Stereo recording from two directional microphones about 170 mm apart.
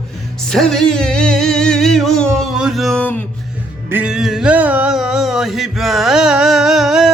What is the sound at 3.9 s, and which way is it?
Music, 5° right (ahead or behind).